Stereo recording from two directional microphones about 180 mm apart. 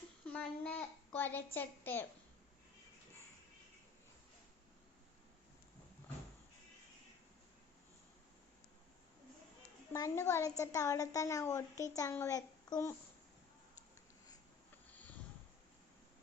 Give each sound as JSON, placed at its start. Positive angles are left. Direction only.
{"t": 0.3, "sound": "a child's voice", "side_deg": 10}
{"t": 9.9, "sound": "a woman's voice", "side_deg": 20}